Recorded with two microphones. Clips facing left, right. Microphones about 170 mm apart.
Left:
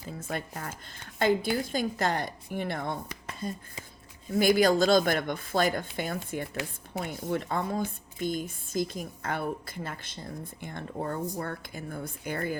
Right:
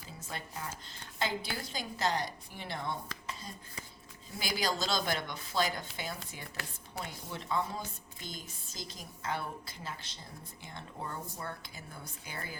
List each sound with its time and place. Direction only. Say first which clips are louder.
0.2 s a woman's voice: left 6 dB; 55° left (ahead or behind)